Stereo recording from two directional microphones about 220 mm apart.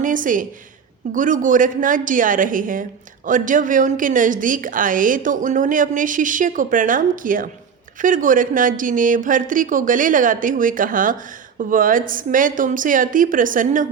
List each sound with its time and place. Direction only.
0.0 s a woman's voice: 35° right (ahead or behind)